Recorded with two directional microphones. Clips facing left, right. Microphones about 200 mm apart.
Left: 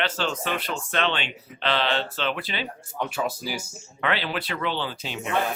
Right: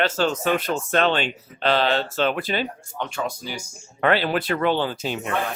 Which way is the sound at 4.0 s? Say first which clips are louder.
Right 7 dB; 45° right (ahead or behind).